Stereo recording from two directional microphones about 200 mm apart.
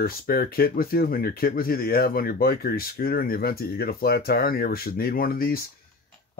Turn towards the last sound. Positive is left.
turn(degrees=45)  # may be behind; listen again after turning